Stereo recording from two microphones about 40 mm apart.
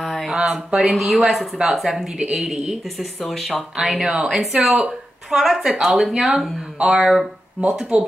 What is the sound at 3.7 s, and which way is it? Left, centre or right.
A woman's voice, centre.